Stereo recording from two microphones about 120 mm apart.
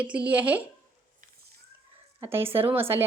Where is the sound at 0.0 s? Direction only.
10° right (ahead or behind).